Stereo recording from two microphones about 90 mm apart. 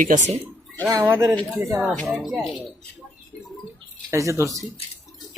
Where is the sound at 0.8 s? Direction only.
25° right (ahead or behind).